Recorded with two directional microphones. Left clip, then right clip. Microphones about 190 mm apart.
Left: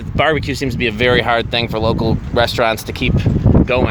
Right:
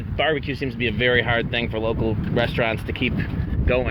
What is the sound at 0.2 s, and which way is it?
Speech, 35° left (ahead or behind).